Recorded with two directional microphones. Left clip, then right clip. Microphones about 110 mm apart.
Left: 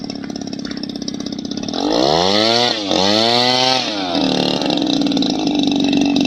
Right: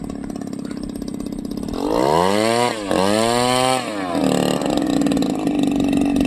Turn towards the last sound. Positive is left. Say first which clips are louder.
# left 3 dB
turn(degrees=-15)  # may be behind; listen again after turning